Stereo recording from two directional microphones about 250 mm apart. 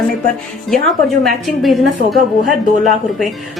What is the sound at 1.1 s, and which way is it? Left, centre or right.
A woman's voice, centre.